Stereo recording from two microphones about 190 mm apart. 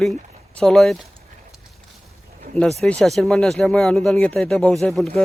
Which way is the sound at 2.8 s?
Centre (ahead or behind).